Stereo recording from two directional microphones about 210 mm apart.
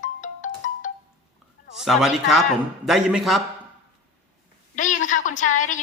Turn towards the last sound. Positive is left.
turn(degrees=35)  # may be behind; listen again after turning